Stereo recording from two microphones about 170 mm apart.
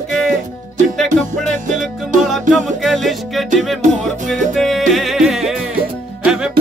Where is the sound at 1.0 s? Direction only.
45° right (ahead or behind).